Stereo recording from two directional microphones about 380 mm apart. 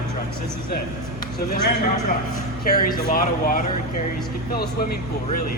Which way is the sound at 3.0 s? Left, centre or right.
Left.